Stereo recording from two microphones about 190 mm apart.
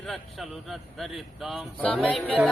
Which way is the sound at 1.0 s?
Centre (ahead or behind).